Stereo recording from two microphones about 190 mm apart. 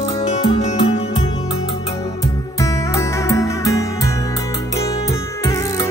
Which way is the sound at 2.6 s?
15° left (ahead or behind).